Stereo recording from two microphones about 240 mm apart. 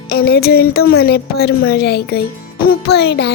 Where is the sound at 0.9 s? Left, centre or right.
Left.